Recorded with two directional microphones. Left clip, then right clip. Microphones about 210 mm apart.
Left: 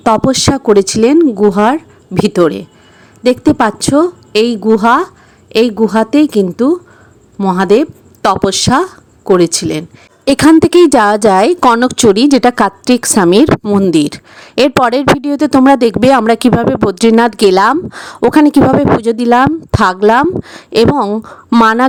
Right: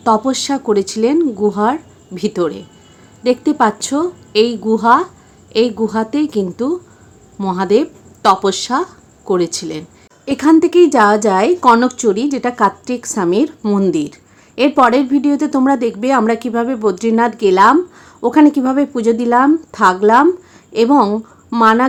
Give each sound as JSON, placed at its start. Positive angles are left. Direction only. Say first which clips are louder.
{"t": 0.0, "sound": "a woman's voice", "louder": "left 4 dB", "side_deg": 35}